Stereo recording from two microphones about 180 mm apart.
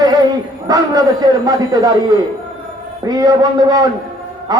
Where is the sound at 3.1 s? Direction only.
20° right (ahead or behind).